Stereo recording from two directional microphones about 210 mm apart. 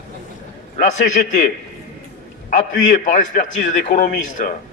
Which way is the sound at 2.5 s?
35° left (ahead or behind).